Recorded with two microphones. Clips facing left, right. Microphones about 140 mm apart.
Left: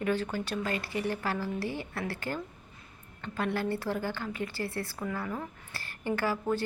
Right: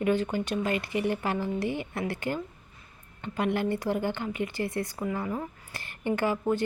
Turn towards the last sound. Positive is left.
turn(degrees=-15)  # may be behind; listen again after turning